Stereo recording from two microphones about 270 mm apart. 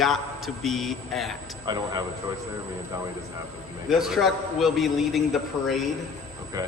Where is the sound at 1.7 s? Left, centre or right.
Centre.